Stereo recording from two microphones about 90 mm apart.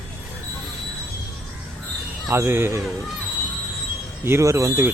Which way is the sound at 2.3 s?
25° right (ahead or behind).